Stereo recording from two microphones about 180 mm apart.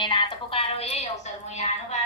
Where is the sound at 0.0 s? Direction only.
30° left (ahead or behind).